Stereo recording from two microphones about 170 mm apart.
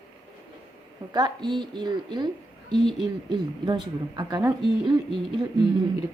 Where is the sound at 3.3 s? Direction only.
25° right (ahead or behind).